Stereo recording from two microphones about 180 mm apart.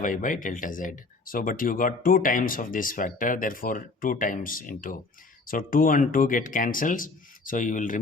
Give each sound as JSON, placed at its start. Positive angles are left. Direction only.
{"t": 0.0, "sound": "speech", "side_deg": 50}